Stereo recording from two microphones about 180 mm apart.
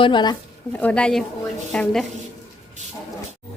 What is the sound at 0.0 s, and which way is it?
Speech, 25° left (ahead or behind).